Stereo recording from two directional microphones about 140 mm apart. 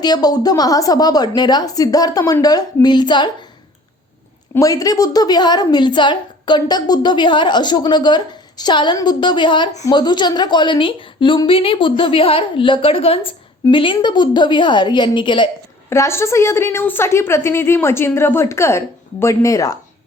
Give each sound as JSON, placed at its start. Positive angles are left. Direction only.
{"t": 0.0, "sound": "a woman's voice", "side_deg": 30}
{"t": 4.5, "sound": "a woman's voice", "side_deg": 25}
{"t": 15.9, "sound": "a woman's voice", "side_deg": 20}